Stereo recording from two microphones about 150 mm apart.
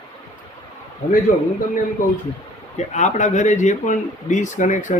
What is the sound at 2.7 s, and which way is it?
Speech, 50° left (ahead or behind).